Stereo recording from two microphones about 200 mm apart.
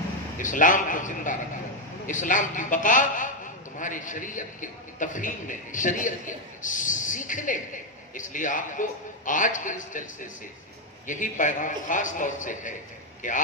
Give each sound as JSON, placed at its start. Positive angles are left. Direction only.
{"t": 0.4, "sound": "a man's voice", "side_deg": 40}